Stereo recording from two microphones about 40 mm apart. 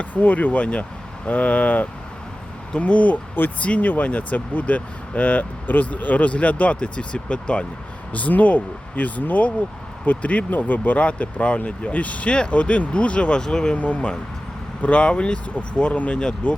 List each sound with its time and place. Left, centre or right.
0.0 s speech: left
6.7 s speech: left
8.1 s speech: left
11.0 s speech: left
13.4 s speech: centre
13.7 s speech: left